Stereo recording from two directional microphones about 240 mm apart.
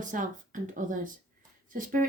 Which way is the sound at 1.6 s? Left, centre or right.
Right.